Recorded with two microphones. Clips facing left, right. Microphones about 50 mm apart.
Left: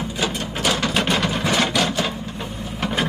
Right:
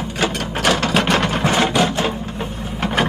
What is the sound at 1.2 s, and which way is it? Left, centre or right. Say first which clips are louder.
Sewing machine: right 3 dB; right.